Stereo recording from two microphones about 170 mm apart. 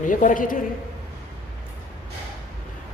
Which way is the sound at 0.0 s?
50° left (ahead or behind).